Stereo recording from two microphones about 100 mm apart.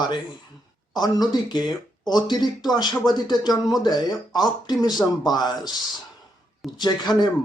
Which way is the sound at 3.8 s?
45° left (ahead or behind).